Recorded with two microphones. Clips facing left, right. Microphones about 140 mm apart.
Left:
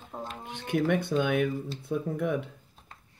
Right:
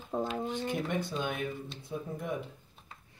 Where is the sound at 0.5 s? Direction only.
70° left (ahead or behind).